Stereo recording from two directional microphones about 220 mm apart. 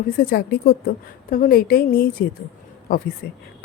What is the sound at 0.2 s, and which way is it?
A woman's voice, 45° left (ahead or behind).